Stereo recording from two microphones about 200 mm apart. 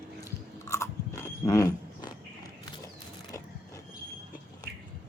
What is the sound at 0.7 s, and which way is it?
Biting, 15° left (ahead or behind).